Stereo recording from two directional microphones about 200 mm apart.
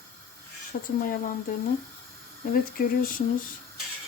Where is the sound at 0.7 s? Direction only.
45° left (ahead or behind).